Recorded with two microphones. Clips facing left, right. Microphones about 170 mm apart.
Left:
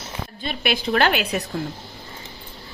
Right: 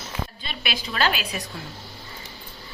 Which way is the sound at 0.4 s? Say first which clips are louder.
Left 8 dB; 55° left (ahead or behind).